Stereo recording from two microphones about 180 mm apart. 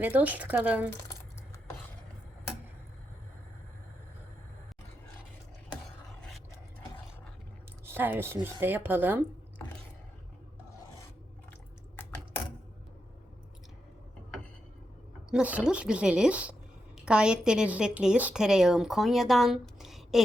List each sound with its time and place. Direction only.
0.0 s a woman's voice: 10° right (ahead or behind)
7.9 s a woman's voice: 10° right (ahead or behind)
15.3 s a woman's voice: 5° right (ahead or behind)